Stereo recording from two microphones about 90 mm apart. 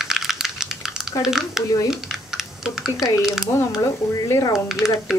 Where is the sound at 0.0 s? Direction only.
5° right (ahead or behind).